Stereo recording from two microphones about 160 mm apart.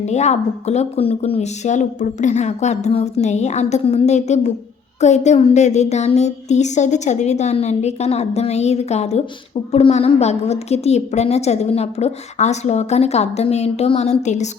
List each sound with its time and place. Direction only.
0.0 s a woman's voice: 45° left (ahead or behind)